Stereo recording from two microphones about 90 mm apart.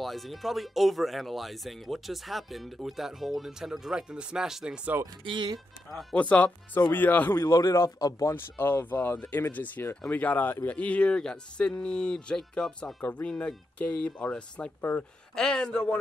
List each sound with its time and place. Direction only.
0.0 s speech: centre (ahead or behind)
5.2 s speech: 65° right (ahead or behind)
6.1 s speech: 15° left (ahead or behind)
7.4 s a man's voice: 45° left (ahead or behind)
8.0 s speech: 35° left (ahead or behind)
8.5 s speech: 25° left (ahead or behind)
15.3 s speech: 10° left (ahead or behind)